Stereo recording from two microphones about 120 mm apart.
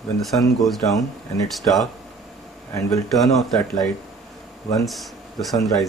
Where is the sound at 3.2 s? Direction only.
Centre (ahead or behind).